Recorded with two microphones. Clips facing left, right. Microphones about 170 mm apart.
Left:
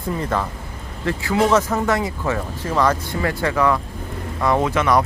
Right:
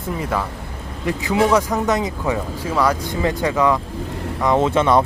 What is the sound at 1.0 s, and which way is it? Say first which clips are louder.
Speech: right 1 dB; 15° right (ahead or behind).